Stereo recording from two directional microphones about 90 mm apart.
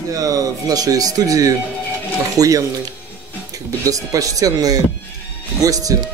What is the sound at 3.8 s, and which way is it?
A man's voice, 40° right (ahead or behind).